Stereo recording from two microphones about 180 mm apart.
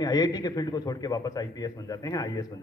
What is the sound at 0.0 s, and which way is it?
A man's voice, 20° left (ahead or behind).